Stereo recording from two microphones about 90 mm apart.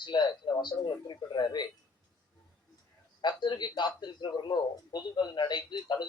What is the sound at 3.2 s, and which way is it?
A man's voice, 55° left (ahead or behind).